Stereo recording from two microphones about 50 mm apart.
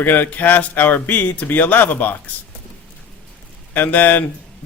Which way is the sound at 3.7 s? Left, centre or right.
Left.